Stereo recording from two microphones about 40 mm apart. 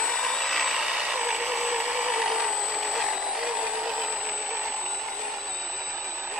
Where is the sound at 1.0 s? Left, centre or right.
Right.